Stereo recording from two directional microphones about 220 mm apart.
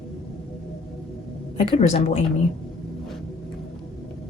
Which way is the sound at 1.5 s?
30° left (ahead or behind).